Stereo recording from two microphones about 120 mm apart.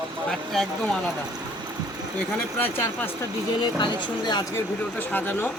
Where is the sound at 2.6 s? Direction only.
15° left (ahead or behind).